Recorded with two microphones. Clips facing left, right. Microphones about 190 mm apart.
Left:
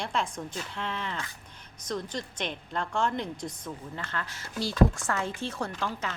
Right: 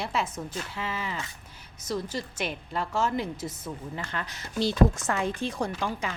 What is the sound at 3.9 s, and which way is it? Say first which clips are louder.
Speech: right 2 dB; 15° right (ahead or behind).